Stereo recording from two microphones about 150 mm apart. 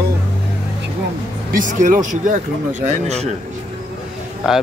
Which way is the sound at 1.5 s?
60° right (ahead or behind).